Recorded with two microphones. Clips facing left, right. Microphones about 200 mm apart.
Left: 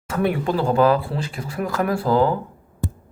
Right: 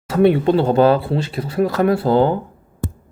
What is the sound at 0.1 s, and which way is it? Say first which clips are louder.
Speech: right 8 dB; 30° right (ahead or behind).